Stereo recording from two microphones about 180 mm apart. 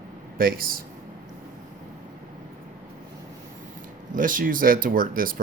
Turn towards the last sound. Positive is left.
turn(degrees=-50)  # may be behind; listen again after turning